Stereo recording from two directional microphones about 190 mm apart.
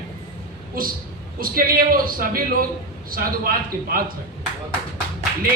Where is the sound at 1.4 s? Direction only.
50° right (ahead or behind).